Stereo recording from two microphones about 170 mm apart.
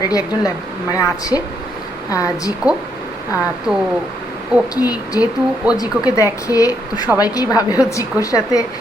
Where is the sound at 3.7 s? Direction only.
5° right (ahead or behind).